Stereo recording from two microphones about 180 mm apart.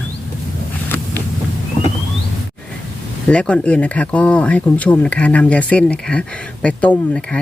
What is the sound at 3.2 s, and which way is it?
Speech, 5° left (ahead or behind).